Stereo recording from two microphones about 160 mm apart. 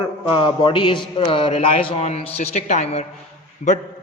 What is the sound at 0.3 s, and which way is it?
A man's voice, 30° left (ahead or behind).